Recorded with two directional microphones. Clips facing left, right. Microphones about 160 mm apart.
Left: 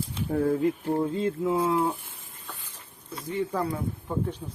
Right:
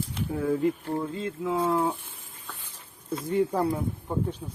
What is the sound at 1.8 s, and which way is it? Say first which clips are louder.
Speech: even; 5° left (ahead or behind).